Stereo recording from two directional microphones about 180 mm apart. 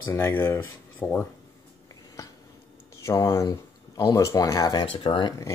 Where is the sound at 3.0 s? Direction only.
15° left (ahead or behind).